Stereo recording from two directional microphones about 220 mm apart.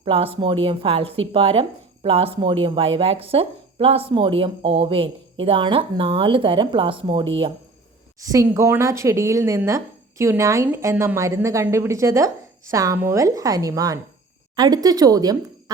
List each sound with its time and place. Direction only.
0.0 s a woman's voice: 25° right (ahead or behind)